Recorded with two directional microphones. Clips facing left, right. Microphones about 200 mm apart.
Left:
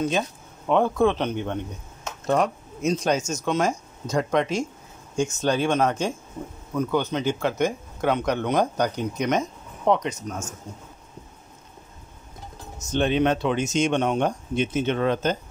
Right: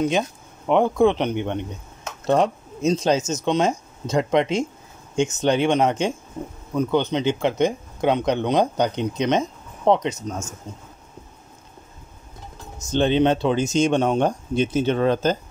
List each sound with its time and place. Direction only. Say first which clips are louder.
0.7 s speech: right 3 dB; 15° right (ahead or behind)
12.9 s speech: right 3 dB; 30° right (ahead or behind)